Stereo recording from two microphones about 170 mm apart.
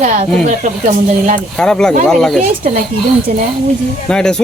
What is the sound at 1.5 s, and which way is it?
Speech, 5° left (ahead or behind).